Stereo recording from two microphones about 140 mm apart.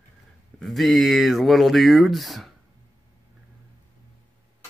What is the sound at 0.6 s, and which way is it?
Speech, centre (ahead or behind).